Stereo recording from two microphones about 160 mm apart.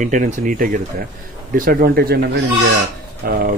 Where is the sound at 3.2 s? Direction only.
70° right (ahead or behind).